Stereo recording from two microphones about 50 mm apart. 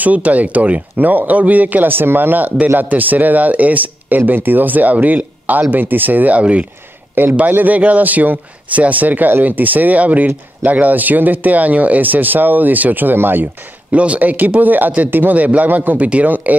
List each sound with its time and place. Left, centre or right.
0.0 s speech: right
7.2 s speech: right
13.9 s speech: right